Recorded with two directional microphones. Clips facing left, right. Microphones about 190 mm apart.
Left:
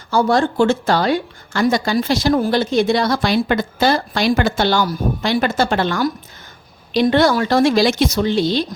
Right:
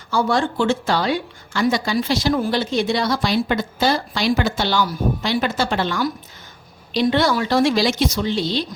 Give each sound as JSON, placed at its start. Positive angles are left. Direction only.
{"t": 0.1, "sound": "a woman's voice", "side_deg": 40}